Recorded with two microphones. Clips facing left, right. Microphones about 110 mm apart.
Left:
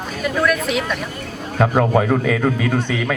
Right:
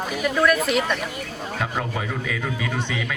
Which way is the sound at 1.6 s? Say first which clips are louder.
Left 12 dB; 60° left (ahead or behind).